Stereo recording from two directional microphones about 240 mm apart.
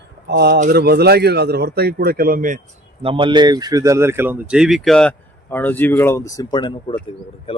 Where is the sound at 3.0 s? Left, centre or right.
Right.